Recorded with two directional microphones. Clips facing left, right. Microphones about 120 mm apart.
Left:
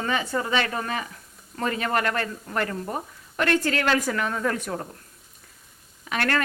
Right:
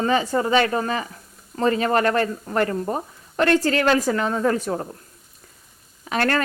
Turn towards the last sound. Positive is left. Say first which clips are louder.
# right 4 dB
turn(degrees=-35)  # may be behind; listen again after turning